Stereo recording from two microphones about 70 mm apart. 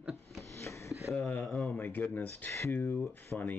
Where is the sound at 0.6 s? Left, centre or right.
Left.